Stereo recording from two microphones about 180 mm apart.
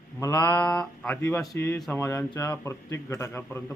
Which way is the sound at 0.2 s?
15° left (ahead or behind).